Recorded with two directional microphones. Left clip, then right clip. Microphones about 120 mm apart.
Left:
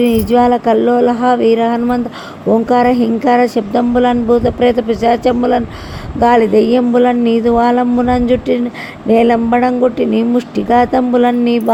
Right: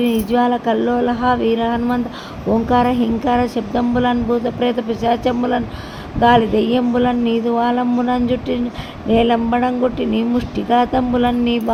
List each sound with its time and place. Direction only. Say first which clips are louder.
0.0 s speech: left 6 dB; 50° left (ahead or behind)
6.1 s speech: left 4 dB; 60° left (ahead or behind)